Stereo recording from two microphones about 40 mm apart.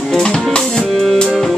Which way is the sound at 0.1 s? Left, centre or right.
Centre.